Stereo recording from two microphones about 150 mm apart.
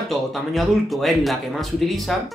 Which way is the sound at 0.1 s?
Centre (ahead or behind).